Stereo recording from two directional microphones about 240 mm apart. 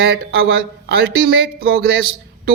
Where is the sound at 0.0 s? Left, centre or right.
Right.